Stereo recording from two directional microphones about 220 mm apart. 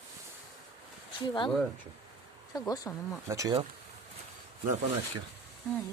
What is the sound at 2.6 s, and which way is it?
Speech, 15° left (ahead or behind).